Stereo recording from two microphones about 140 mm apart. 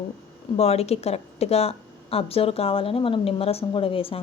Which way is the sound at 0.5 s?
50° left (ahead or behind).